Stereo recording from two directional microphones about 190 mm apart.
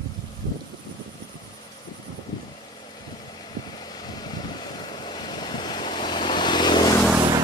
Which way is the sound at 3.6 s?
20° left (ahead or behind).